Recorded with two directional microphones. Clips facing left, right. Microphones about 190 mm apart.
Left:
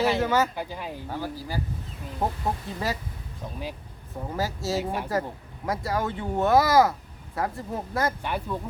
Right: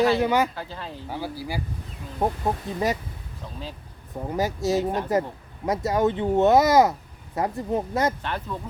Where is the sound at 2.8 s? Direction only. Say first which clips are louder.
Right 5 dB; 20° right (ahead or behind).